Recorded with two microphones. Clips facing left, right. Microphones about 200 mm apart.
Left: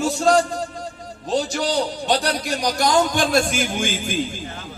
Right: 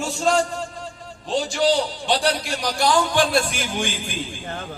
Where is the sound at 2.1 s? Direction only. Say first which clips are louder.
Right 2 dB; 45° left (ahead or behind).